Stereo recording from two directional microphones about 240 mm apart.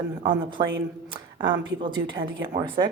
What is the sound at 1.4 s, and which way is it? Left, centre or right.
A woman's voice, centre.